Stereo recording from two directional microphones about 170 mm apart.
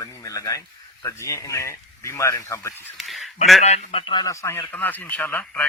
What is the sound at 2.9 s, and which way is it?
Speech, centre (ahead or behind).